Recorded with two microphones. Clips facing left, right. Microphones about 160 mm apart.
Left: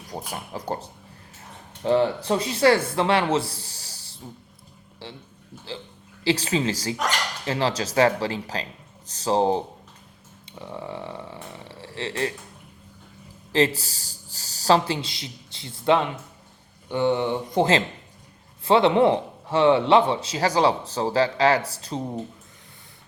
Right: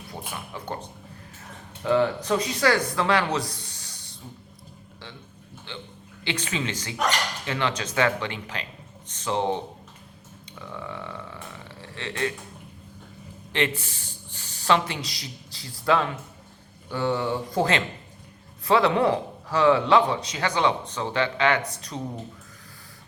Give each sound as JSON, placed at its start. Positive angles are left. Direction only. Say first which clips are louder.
{"t": 0.1, "sound": "speech", "louder": "left 4 dB", "side_deg": 40}
{"t": 5.0, "sound": "a sound", "louder": "left 5 dB", "side_deg": 30}
{"t": 5.7, "sound": "speech", "louder": "left 4 dB", "side_deg": 35}
{"t": 7.4, "sound": "cutlery", "louder": "left 4 dB", "side_deg": 35}
{"t": 7.8, "sound": "speech", "louder": "left 7 dB", "side_deg": 35}
{"t": 10.4, "sound": "burping", "louder": "left 2 dB", "side_deg": 30}
{"t": 13.5, "sound": "a man's voice", "louder": "left 5 dB", "side_deg": 35}